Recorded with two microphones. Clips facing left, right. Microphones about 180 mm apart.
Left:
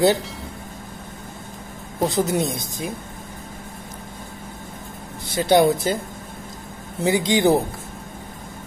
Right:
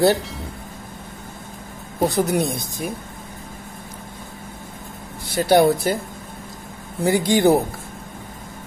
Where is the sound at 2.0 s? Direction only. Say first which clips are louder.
Right 1 dB; 20° left (ahead or behind).